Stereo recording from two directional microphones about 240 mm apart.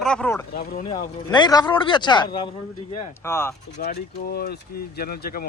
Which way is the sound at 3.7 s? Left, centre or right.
Left.